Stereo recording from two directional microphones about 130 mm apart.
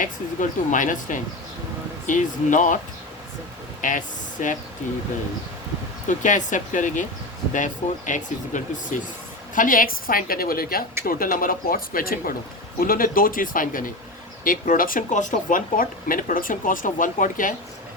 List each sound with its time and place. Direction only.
0.0 s speech: 80° left
3.8 s speech: 80° left
6.1 s speech: 75° left (ahead or behind)
9.6 s speech: 90° left